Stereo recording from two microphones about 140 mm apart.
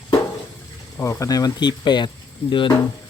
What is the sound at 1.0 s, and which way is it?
Speech, 20° left (ahead or behind).